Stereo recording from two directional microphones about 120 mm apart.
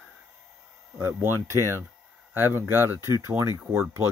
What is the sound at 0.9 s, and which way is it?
Speech, 20° right (ahead or behind).